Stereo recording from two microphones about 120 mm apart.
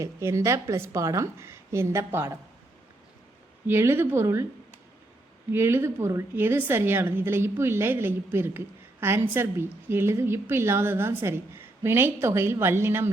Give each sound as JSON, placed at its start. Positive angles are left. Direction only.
{"t": 0.0, "sound": "a woman's voice", "side_deg": -25}
{"t": 3.7, "sound": "a woman's voice", "side_deg": -20}